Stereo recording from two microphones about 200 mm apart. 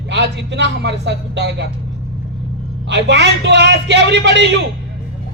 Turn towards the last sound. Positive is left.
turn(degrees=-60)  # may be behind; listen again after turning